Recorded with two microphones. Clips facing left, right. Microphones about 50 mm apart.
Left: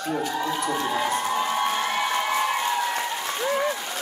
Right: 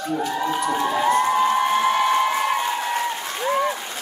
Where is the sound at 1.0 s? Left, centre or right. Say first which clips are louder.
Right 7 dB; right.